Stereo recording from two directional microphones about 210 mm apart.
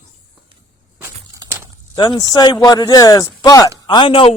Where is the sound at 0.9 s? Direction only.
10° right (ahead or behind).